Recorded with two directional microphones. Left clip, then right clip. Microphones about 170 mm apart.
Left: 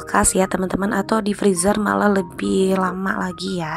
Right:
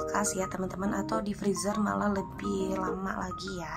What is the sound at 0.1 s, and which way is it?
Speech, 45° left (ahead or behind).